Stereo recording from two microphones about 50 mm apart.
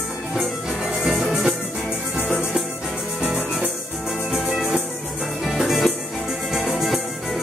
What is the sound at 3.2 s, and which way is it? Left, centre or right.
Music, right.